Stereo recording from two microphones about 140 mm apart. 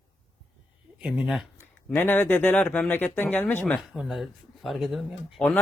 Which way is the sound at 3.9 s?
5° right (ahead or behind).